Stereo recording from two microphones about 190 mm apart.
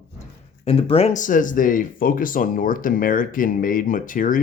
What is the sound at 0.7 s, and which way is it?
Speech, 30° left (ahead or behind).